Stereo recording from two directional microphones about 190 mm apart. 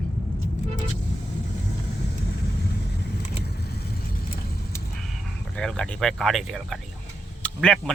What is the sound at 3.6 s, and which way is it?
Vehicle, 55° left (ahead or behind).